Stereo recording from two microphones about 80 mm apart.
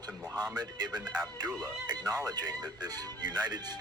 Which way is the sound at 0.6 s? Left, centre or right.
Right.